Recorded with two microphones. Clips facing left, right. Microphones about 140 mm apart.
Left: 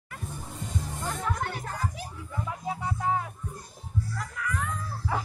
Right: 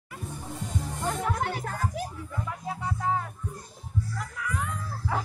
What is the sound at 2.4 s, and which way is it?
Music, 10° left (ahead or behind).